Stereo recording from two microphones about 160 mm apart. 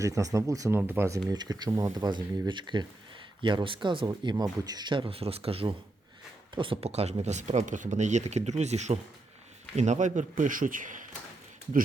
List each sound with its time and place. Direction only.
0.0 s a man's voice: 20° right (ahead or behind); by 11.0 s 55° right (ahead or behind)